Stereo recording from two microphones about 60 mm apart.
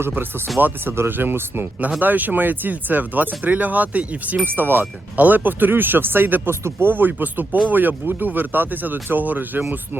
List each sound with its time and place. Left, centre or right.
0.1 s speech: right
6.5 s speech: right